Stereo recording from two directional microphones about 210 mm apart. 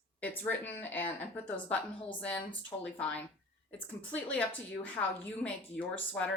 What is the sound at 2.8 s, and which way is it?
Speech, 5° left (ahead or behind).